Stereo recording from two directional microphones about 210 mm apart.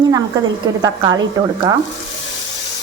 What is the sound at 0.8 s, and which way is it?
Speech, 20° right (ahead or behind).